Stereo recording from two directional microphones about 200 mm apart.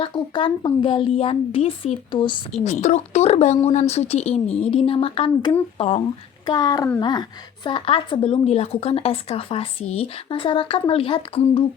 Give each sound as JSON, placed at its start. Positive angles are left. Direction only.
{"t": 0.0, "sound": "a woman's voice", "side_deg": 25}
{"t": 2.6, "sound": "a woman's voice", "side_deg": 35}